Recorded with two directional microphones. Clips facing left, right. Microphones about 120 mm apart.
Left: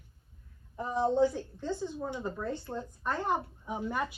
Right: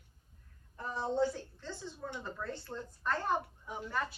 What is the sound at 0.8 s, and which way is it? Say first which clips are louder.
A woman's voice: left 6 dB; 15° left (ahead or behind).